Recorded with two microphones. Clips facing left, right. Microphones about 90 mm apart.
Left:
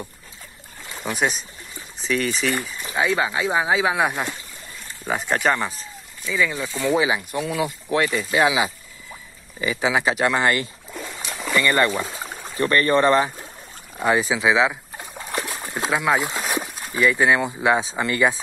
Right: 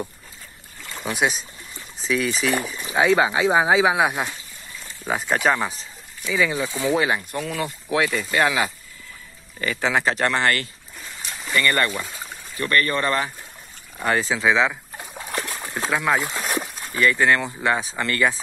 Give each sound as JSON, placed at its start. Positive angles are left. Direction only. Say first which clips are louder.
{"t": 0.9, "sound": "speech", "louder": "even", "side_deg": 0}
{"t": 2.9, "sound": "speech", "louder": "right 4 dB", "side_deg": -20}
{"t": 4.0, "sound": "speech", "louder": "right 1 dB", "side_deg": -5}
{"t": 6.2, "sound": "speech", "louder": "right 1 dB", "side_deg": -15}
{"t": 6.8, "sound": "speech", "louder": "left 2 dB", "side_deg": 0}
{"t": 12.0, "sound": "a sound", "louder": "left 4 dB", "side_deg": 25}
{"t": 12.5, "sound": "speech", "louder": "left 4 dB", "side_deg": 25}
{"t": 13.9, "sound": "speech", "louder": "left 2 dB", "side_deg": 15}